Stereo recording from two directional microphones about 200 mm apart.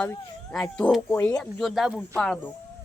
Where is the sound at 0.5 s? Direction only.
5° left (ahead or behind).